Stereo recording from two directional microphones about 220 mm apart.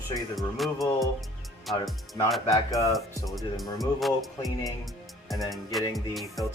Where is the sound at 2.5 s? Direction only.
15° left (ahead or behind).